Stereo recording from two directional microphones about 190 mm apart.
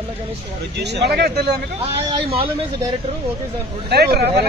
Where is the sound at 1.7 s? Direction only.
30° right (ahead or behind).